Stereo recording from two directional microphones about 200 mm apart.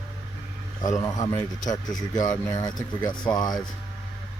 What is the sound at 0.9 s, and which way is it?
Speech, 20° left (ahead or behind).